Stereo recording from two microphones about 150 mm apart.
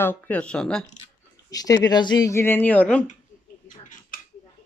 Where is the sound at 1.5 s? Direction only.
25° left (ahead or behind); by 3.0 s 10° left (ahead or behind).